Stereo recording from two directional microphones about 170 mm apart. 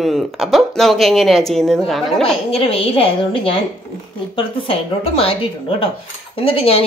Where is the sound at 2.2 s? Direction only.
35° left (ahead or behind).